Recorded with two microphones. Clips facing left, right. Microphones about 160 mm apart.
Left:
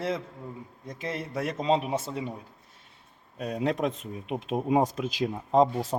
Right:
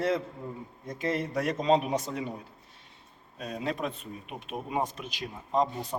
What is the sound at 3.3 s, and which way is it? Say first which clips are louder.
Speech: left 5 dB; 70° left (ahead or behind).